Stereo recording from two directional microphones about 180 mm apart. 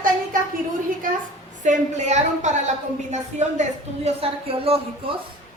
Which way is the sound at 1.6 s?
40° right (ahead or behind).